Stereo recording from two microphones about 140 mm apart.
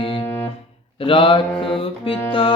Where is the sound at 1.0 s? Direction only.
40° left (ahead or behind).